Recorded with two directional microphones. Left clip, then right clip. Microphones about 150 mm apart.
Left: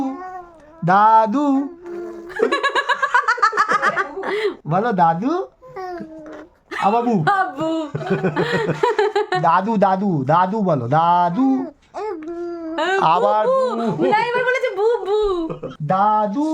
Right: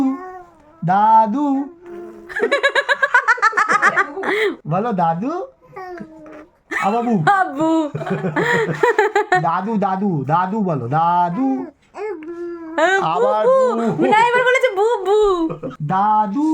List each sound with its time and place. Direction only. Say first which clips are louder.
0.9 s music: even; 60° left (ahead or behind); by 1.6 s 40° left (ahead or behind)
2.5 s laughter: right 4 dB; 25° right (ahead or behind); by 4.5 s 40° right (ahead or behind)
4.7 s speech: left 5 dB; 35° left (ahead or behind)
6.8 s a man's voice: left 2 dB; 30° left (ahead or behind)
7.3 s a sound: right 3 dB; 35° right (ahead or behind)
8.3 s speech: right 6 dB; 30° right (ahead or behind)
9.4 s a man's voice: left 3 dB; 45° left (ahead or behind)
11.4 s babbling: left 2 dB; 20° left (ahead or behind)
12.7 s a sound: right 5 dB; 30° right (ahead or behind)
13.0 s speech: left 2 dB; 35° left (ahead or behind)
13.5 s speech: right 3 dB; 25° right (ahead or behind)
14.1 s speech: right 5 dB; 50° right (ahead or behind)
15.9 s a man's voice: right 1 dB; 30° left (ahead or behind)